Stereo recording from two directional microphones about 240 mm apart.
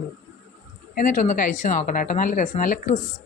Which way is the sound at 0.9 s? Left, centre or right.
Left.